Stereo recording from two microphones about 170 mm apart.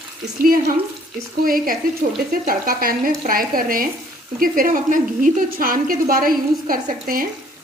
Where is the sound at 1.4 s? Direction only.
55° right (ahead or behind).